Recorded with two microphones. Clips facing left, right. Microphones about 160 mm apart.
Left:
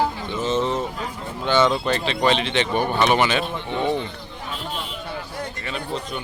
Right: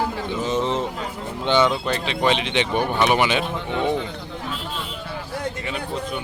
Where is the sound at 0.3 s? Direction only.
15° right (ahead or behind).